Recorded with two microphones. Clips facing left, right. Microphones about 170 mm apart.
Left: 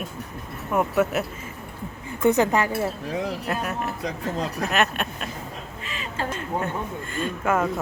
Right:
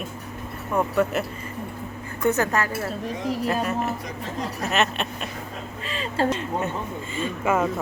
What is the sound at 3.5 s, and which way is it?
A woman's voice, centre (ahead or behind).